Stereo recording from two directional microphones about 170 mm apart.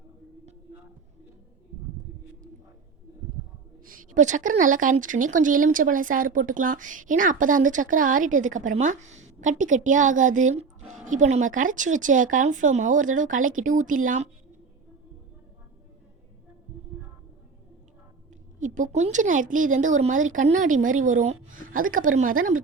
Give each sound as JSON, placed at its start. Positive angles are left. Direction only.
{"t": 3.8, "sound": "speech", "side_deg": -45}
{"t": 18.6, "sound": "speech", "side_deg": -45}